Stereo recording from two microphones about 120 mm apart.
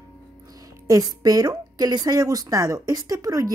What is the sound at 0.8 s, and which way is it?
A woman's voice, 30° right (ahead or behind).